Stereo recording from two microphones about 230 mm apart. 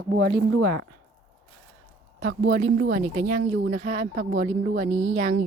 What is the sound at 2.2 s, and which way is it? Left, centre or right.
Speech, right.